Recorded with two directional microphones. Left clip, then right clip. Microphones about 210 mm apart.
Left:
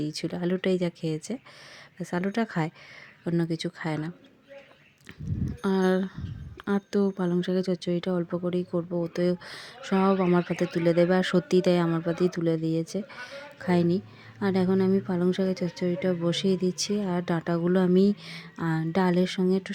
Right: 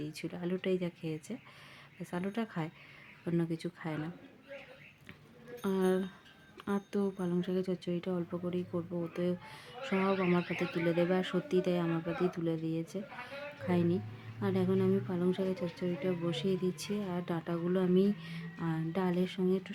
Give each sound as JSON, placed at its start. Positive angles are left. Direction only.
{"t": 0.0, "sound": "speech", "side_deg": 30}
{"t": 5.6, "sound": "speech", "side_deg": 30}